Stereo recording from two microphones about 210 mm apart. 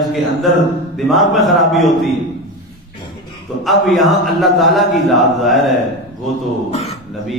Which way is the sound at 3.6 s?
Centre (ahead or behind).